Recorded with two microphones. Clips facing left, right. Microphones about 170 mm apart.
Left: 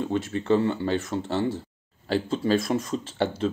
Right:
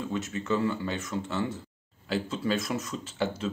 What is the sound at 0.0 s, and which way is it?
Speech, 30° left (ahead or behind).